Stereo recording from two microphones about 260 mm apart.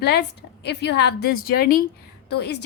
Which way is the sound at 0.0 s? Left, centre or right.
Left.